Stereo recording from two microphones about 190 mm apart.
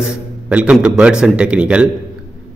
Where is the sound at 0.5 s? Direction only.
5° right (ahead or behind).